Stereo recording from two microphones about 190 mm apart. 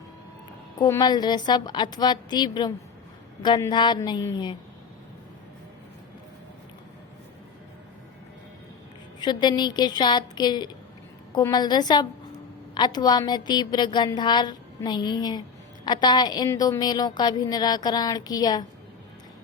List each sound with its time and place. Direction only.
0.8 s a woman's voice: 20° left (ahead or behind)
9.2 s a woman's voice: 20° left (ahead or behind)